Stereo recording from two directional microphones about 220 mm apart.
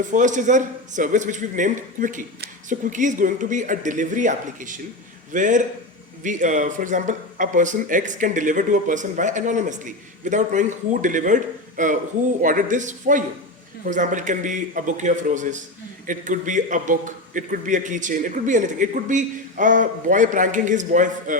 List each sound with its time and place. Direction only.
0.0 s speech: 35° right (ahead or behind)